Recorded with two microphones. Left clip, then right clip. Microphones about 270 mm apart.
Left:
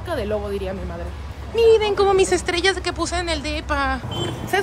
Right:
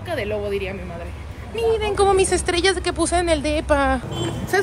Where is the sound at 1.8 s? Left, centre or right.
Centre.